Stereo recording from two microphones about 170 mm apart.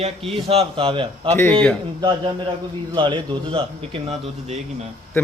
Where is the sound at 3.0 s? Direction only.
30° right (ahead or behind).